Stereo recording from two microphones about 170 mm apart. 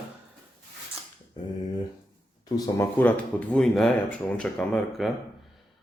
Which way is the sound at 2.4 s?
10° left (ahead or behind).